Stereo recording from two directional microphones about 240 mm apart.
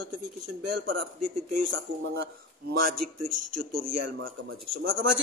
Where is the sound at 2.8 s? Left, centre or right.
Right.